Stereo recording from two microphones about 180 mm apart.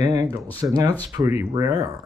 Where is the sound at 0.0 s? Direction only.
20° right (ahead or behind).